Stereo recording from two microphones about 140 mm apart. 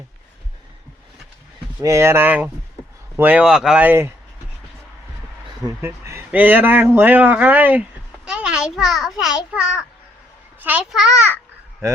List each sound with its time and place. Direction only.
1.8 s speech: 20° right (ahead or behind)
5.8 s a child's voice: 15° right (ahead or behind)